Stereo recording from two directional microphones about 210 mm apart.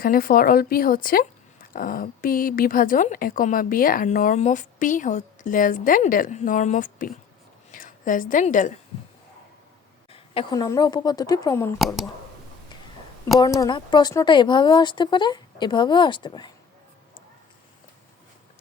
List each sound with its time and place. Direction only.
0.0 s a woman's voice: 45° left (ahead or behind)
10.1 s speech: 25° left (ahead or behind)
13.4 s speech: 20° left (ahead or behind)